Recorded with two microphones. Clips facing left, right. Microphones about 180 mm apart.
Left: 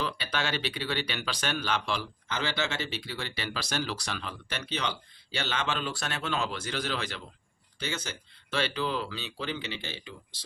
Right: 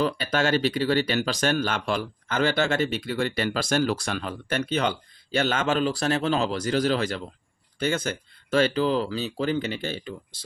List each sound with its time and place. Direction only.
0.0 s speech: 45° right (ahead or behind)